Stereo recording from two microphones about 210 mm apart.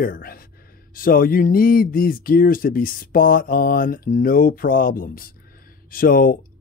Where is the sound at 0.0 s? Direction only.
45° left (ahead or behind).